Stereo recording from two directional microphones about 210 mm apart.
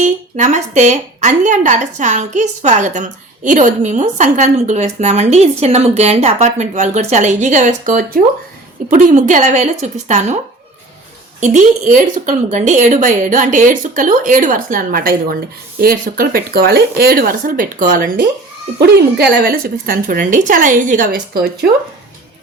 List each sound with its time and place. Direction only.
0.0 s a woman's voice: 35° right (ahead or behind)
11.3 s a woman's voice: 35° right (ahead or behind)
18.8 s a woman's voice: 50° right (ahead or behind)